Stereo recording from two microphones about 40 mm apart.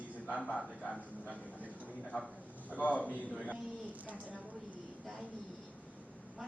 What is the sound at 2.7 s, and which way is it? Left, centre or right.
Speech, left.